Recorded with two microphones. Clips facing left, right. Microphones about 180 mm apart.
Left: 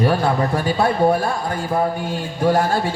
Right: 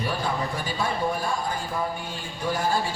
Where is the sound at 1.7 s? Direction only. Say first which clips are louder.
Left 11 dB; 65° left (ahead or behind).